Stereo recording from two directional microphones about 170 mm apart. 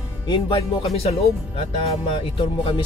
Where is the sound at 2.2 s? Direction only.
30° left (ahead or behind).